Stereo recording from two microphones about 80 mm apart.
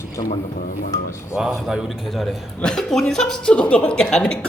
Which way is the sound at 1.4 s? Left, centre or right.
Centre.